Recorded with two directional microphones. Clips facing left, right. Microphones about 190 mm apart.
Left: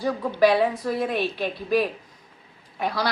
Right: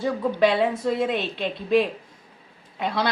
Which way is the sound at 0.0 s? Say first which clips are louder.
Even; 25° right (ahead or behind).